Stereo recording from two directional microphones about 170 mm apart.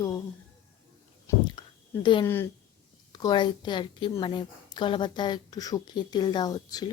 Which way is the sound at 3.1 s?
25° left (ahead or behind).